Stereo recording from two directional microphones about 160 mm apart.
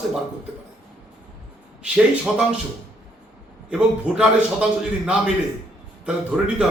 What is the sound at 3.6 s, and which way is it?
A man's voice, 5° right (ahead or behind).